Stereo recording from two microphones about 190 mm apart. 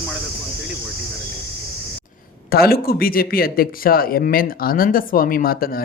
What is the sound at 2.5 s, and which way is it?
Speech, 55° left (ahead or behind).